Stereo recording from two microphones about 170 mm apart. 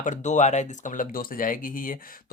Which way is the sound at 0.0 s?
45° left (ahead or behind).